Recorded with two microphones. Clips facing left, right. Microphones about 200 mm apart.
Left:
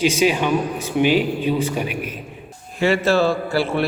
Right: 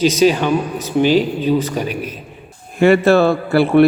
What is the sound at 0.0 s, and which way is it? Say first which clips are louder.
A man's voice: right 4 dB; 35° right (ahead or behind).